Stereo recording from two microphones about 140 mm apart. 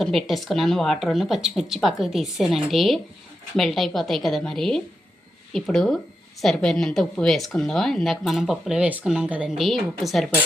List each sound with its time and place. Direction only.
0.0 s speech: centre (ahead or behind)